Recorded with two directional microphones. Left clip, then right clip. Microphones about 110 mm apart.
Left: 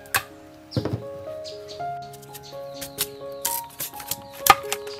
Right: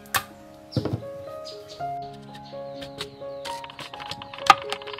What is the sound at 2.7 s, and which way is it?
Music, 10° left (ahead or behind).